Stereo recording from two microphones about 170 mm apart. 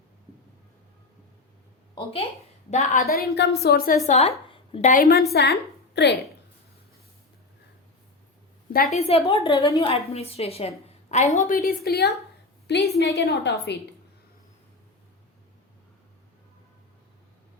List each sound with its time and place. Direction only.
2.6 s a woman's voice: 45° left (ahead or behind)
3.1 s a woman's voice: 70° left (ahead or behind)
4.0 s speech: 40° left (ahead or behind)
4.9 s a woman's voice: 60° left (ahead or behind)
5.3 s a woman's voice: 70° left (ahead or behind)
8.9 s a woman's voice: 35° left (ahead or behind)
9.6 s a woman's voice: 20° left (ahead or behind)
10.1 s a woman's voice: 35° left (ahead or behind); by 13.6 s 70° left (ahead or behind)